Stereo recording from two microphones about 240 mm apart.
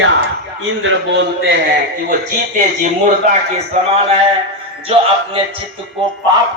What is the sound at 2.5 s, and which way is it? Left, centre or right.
Speech, right.